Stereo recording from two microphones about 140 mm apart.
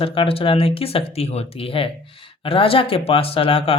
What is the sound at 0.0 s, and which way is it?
Speech, 40° left (ahead or behind).